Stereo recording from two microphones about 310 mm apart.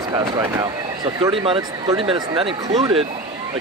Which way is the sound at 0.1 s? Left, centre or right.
Centre.